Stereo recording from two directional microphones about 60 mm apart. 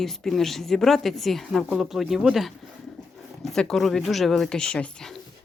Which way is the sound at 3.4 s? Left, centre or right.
Centre.